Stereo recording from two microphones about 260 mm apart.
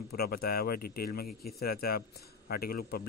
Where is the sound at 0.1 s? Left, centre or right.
Left.